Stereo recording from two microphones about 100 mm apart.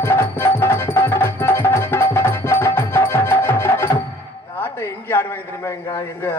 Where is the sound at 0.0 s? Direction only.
25° left (ahead or behind).